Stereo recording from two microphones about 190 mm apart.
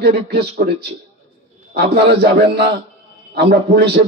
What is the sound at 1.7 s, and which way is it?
A man's voice, 55° right (ahead or behind).